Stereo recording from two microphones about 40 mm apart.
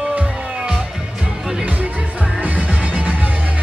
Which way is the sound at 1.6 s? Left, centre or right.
Right.